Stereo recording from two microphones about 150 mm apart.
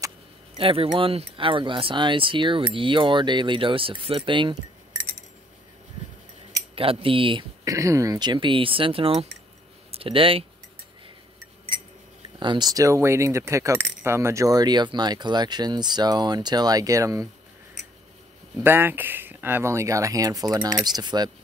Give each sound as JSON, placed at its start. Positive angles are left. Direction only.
{"t": 0.6, "sound": "speech", "side_deg": -35}
{"t": 6.7, "sound": "speech", "side_deg": -40}
{"t": 7.6, "sound": "speech", "side_deg": -20}
{"t": 12.4, "sound": "speech", "side_deg": -30}
{"t": 18.6, "sound": "speech", "side_deg": -15}